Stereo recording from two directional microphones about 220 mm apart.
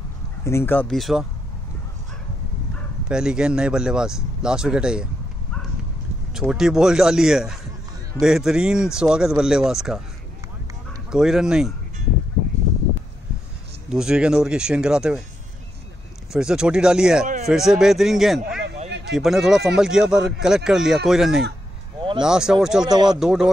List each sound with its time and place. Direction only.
0.5 s speech: 10° left (ahead or behind)
3.1 s speech: 5° right (ahead or behind)
6.3 s speech: centre (ahead or behind)
11.1 s speech: centre (ahead or behind)
13.8 s speech: 5° right (ahead or behind)
16.3 s speech: 5° right (ahead or behind)
18.9 s a sound: 50° right (ahead or behind)
19.1 s speech: centre (ahead or behind)
22.8 s speech: 20° right (ahead or behind)
23.1 s speech: 5° right (ahead or behind)